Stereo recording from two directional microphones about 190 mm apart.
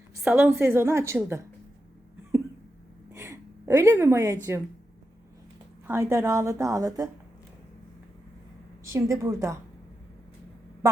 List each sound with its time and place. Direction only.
0.2 s a woman's voice: 10° right (ahead or behind)
3.1 s gasp: 15° right (ahead or behind)
5.9 s a woman's voice: 15° right (ahead or behind)
8.9 s a woman's voice: 15° right (ahead or behind)